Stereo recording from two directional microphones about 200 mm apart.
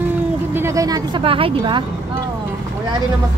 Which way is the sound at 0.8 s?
25° right (ahead or behind).